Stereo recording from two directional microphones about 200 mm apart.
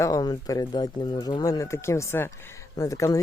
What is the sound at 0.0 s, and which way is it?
Speech, 20° left (ahead or behind).